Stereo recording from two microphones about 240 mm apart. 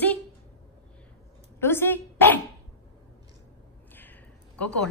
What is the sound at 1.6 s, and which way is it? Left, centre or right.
Speech, centre.